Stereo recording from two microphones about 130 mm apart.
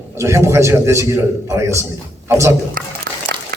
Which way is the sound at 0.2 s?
20° right (ahead or behind).